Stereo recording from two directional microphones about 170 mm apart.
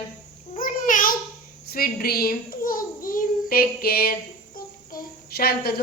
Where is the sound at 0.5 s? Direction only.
55° left (ahead or behind).